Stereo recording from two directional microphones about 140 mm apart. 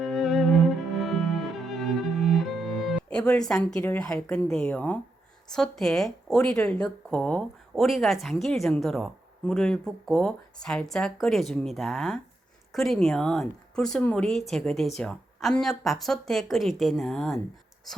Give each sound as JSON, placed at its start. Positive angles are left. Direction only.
{"t": 0.0, "sound": "cello", "side_deg": 0}
{"t": 3.1, "sound": "a woman's voice", "side_deg": 5}